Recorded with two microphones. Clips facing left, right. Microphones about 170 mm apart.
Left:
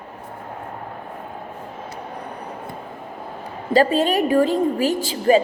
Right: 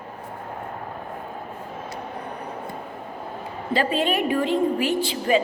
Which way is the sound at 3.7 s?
40° left (ahead or behind).